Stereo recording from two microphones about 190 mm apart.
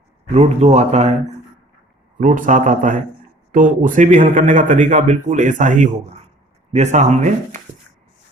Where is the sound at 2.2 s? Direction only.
40° right (ahead or behind).